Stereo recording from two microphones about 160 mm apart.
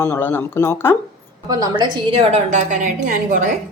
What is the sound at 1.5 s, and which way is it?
A woman's voice, 25° right (ahead or behind).